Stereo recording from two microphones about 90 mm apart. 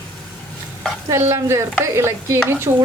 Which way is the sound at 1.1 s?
30° right (ahead or behind).